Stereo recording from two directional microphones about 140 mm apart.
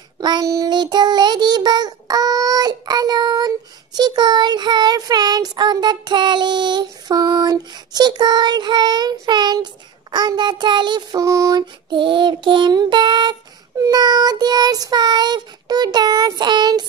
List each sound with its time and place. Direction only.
0.2 s child singing: 30° right (ahead or behind)